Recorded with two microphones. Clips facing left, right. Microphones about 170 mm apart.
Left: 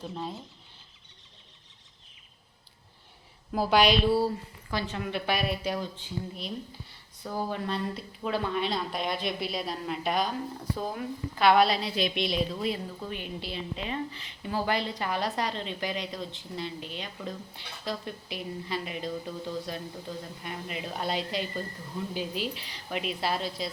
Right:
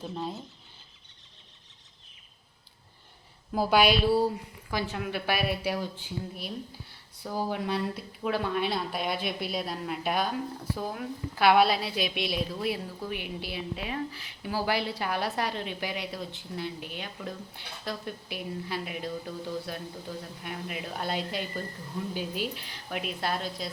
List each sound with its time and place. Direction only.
0.0 s speech: 5° right (ahead or behind)
3.5 s speech: centre (ahead or behind)